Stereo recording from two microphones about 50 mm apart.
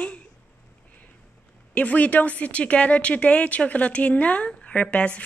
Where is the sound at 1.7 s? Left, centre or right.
Left.